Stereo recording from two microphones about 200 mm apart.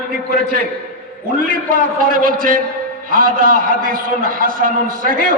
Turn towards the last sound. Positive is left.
turn(degrees=-45)  # may be behind; listen again after turning